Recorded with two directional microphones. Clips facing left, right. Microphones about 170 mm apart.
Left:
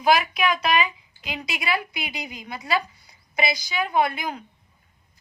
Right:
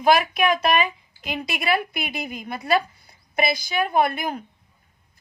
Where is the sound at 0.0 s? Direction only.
50° right (ahead or behind).